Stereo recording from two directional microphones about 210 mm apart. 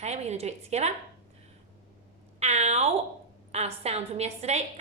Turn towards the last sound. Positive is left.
turn(degrees=-30)  # may be behind; listen again after turning